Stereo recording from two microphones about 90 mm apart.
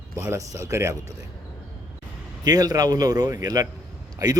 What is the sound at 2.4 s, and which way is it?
A man's voice, 45° right (ahead or behind).